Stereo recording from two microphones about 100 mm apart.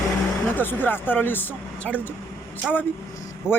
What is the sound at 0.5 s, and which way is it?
Speech, 20° left (ahead or behind).